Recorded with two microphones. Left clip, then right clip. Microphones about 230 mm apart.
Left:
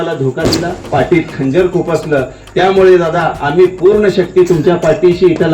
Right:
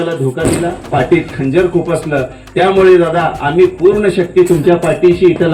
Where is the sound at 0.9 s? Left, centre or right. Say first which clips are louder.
Left 1 dB; right.